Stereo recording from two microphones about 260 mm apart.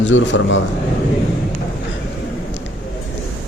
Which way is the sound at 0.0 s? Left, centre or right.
Left.